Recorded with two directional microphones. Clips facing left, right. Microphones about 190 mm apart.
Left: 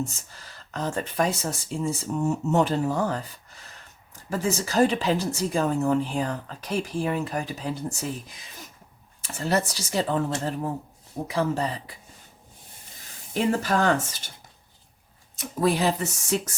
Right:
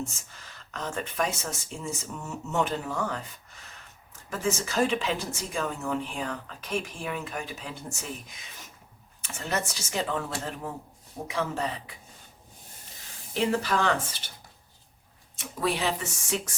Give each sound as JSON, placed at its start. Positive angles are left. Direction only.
{"t": 0.3, "sound": "speech", "side_deg": 35}
{"t": 9.2, "sound": "speech", "side_deg": 35}
{"t": 13.3, "sound": "speech", "side_deg": 45}
{"t": 15.4, "sound": "speech", "side_deg": 40}